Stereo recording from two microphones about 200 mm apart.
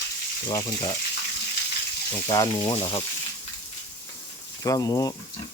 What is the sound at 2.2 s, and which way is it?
Speech, 20° left (ahead or behind).